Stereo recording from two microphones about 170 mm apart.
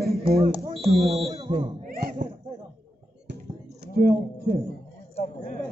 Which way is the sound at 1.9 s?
60° right (ahead or behind).